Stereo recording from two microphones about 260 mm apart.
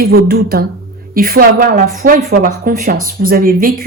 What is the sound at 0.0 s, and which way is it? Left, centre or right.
A woman's voice, right.